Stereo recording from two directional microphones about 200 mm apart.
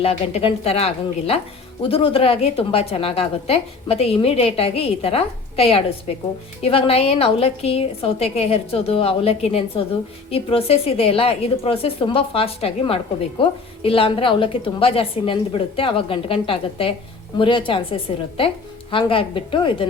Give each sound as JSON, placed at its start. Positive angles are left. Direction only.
{"t": 0.0, "sound": "a woman's voice", "side_deg": 30}